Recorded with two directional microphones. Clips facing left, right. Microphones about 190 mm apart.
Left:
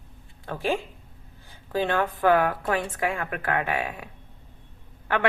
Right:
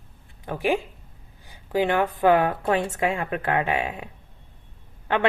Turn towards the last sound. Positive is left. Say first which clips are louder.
# right 2 dB
turn(degrees=-20)  # may be behind; listen again after turning